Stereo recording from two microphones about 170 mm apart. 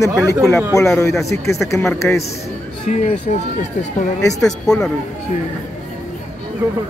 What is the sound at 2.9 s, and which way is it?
Speech, 45° left (ahead or behind).